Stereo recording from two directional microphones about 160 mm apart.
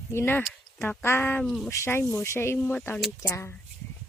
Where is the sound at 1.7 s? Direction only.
15° left (ahead or behind).